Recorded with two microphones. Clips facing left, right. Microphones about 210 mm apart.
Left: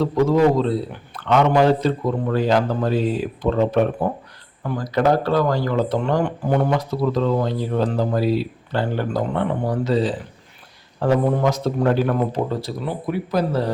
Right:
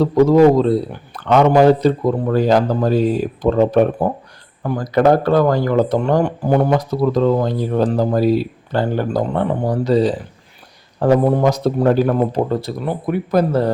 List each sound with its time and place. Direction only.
0.0 s a man's voice: 40° right (ahead or behind)
12.5 s speech: 50° right (ahead or behind)